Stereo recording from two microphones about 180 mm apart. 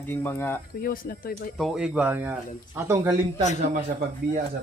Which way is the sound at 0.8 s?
50° left (ahead or behind).